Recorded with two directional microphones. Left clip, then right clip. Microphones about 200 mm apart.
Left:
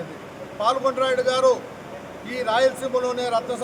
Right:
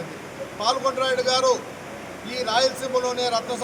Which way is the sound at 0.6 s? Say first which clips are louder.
Left 2 dB; 5° left (ahead or behind).